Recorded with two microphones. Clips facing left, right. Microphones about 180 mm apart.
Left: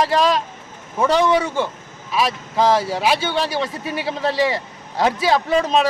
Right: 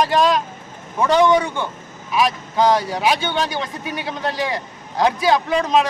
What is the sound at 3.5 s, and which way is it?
Speech, 30° left (ahead or behind).